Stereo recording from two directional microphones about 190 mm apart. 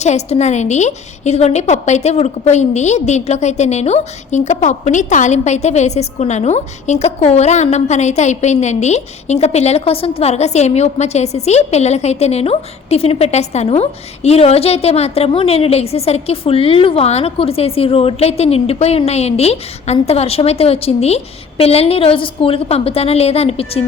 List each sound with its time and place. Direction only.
0.0 s a woman's voice: 35° left (ahead or behind)